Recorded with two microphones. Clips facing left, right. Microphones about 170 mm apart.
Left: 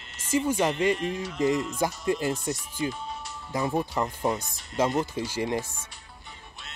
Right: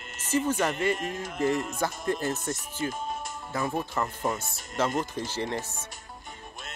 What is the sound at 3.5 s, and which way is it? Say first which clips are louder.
Speech: left 3 dB; 15° left (ahead or behind).